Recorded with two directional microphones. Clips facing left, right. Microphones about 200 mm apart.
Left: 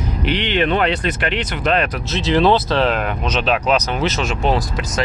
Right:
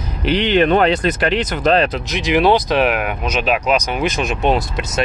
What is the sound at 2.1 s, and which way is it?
Speech, 15° right (ahead or behind).